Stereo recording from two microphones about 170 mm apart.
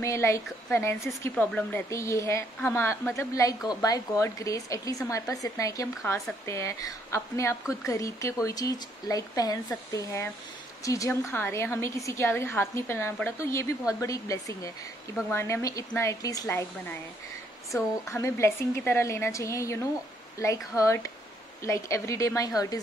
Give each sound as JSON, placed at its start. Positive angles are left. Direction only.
{"t": 0.0, "sound": "a woman's voice", "side_deg": 15}
{"t": 17.7, "sound": "a woman's voice", "side_deg": 15}